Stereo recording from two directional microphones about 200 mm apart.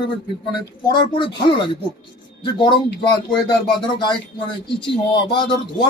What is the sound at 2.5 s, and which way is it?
Speech, 20° left (ahead or behind).